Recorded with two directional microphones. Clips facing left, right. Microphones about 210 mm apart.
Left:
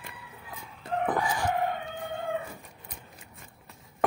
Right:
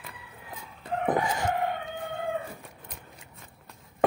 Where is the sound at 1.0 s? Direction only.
25° right (ahead or behind).